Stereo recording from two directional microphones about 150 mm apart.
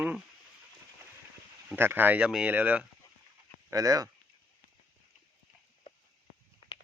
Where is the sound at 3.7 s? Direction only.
25° right (ahead or behind).